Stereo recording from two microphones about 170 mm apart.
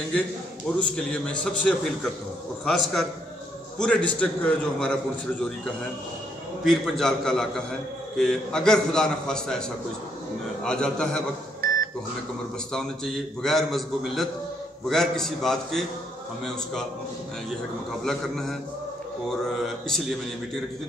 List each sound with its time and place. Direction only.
0.7 s a man's voice: 5° left (ahead or behind)
6.6 s a man's voice: centre (ahead or behind)
11.6 s microwave oven: 60° right (ahead or behind)
12.7 s a man's voice: 5° left (ahead or behind)
18.0 s a man's voice: centre (ahead or behind)